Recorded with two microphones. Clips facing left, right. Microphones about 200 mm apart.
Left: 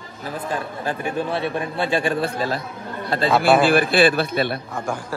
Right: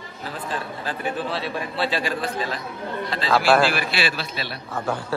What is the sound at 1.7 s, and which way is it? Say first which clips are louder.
Speech: left 2 dB; 50° left (ahead or behind).